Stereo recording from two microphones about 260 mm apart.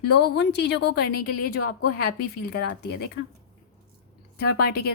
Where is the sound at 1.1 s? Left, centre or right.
Left.